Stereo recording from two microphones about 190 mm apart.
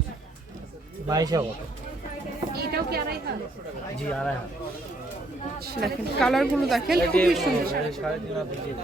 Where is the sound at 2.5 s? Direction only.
55° right (ahead or behind).